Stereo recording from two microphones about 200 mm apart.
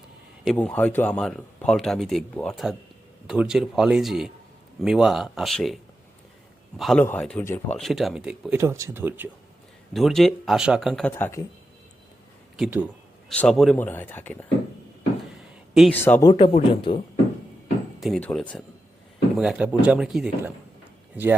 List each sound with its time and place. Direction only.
0.4 s speech: 5° left (ahead or behind); by 9.3 s 10° right (ahead or behind)
9.9 s speech: centre (ahead or behind)
11.1 s speech: 15° left (ahead or behind)
12.5 s speech: centre (ahead or behind)
15.7 s speech: centre (ahead or behind)
16.3 s a man's voice: 25° left (ahead or behind)
18.0 s speech: 5° left (ahead or behind)